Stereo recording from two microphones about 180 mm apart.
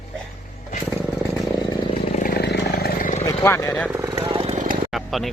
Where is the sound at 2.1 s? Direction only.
55° left (ahead or behind).